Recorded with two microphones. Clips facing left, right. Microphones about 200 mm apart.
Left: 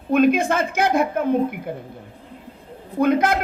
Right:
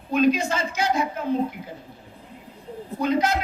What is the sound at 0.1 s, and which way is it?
A man's voice, 55° left (ahead or behind).